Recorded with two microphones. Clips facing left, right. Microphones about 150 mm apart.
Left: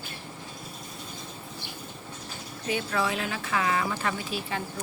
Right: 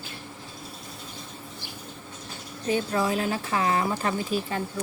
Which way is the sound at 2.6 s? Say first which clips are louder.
Right 3 dB; 35° right (ahead or behind).